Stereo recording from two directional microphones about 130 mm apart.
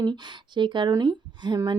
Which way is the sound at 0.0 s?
35° right (ahead or behind).